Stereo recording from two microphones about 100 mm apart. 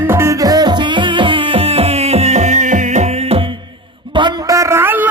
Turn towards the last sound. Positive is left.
turn(degrees=-20)  # may be behind; listen again after turning